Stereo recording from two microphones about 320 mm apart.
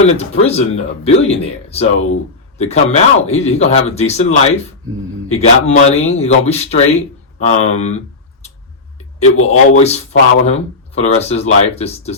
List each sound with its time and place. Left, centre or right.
0.2 s speech: centre